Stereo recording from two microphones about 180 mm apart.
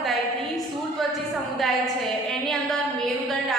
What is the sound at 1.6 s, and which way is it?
A woman's voice, centre (ahead or behind).